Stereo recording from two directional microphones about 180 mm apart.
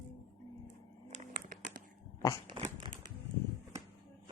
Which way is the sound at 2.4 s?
30° right (ahead or behind).